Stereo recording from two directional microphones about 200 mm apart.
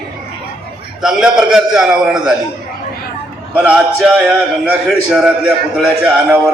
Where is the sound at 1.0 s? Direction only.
5° right (ahead or behind).